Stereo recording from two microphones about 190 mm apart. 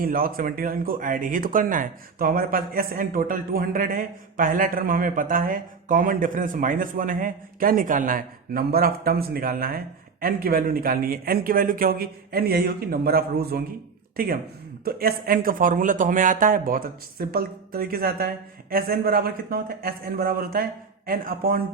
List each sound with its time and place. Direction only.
0.0 s speech: 50° right (ahead or behind)
14.8 s speech: 50° right (ahead or behind)